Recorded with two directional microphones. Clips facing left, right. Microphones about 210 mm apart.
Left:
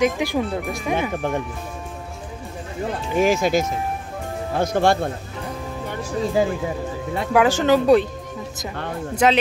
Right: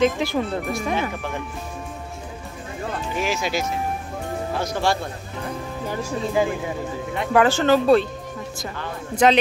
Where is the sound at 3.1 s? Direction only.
50° left (ahead or behind).